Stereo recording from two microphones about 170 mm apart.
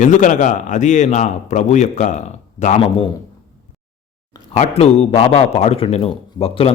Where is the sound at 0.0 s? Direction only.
45° left (ahead or behind).